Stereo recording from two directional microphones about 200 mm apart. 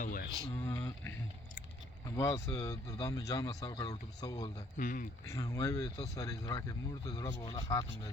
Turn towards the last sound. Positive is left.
turn(degrees=15)  # may be behind; listen again after turning